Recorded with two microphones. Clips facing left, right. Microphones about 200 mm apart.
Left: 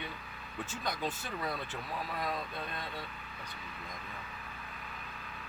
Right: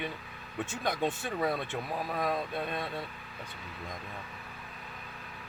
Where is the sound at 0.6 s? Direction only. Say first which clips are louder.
Right 5 dB; 85° right.